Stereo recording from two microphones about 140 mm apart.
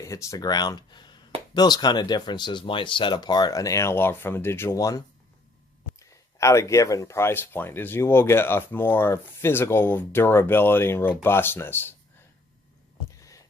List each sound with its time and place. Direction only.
0.0 s speech: 25° left (ahead or behind)